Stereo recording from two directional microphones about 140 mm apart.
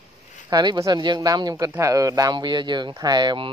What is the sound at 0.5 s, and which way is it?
A woman's voice, 30° right (ahead or behind).